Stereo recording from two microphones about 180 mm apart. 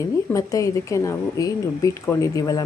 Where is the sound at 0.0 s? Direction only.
15° left (ahead or behind).